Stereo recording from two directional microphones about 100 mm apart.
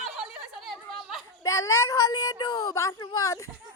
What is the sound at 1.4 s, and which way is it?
Speech, 35° left (ahead or behind).